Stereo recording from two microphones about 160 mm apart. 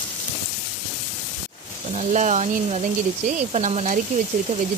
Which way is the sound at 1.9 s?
45° right (ahead or behind).